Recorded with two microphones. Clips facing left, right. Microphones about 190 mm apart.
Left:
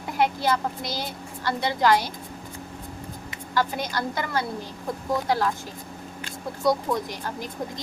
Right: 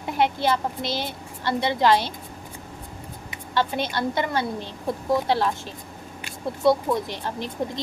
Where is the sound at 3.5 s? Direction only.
25° right (ahead or behind).